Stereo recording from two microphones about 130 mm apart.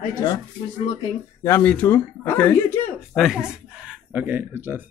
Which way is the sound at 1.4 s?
20° left (ahead or behind).